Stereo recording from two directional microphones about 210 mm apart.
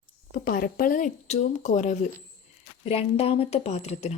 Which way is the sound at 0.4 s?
40° left (ahead or behind).